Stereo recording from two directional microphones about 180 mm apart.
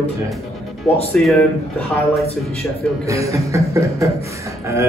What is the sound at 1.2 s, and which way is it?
A woman's voice, centre (ahead or behind).